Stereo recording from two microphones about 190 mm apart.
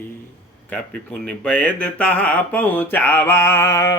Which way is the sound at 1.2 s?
5° left (ahead or behind).